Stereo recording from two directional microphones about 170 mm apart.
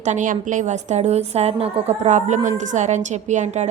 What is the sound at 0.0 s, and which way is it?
A woman's voice, 45° right (ahead or behind).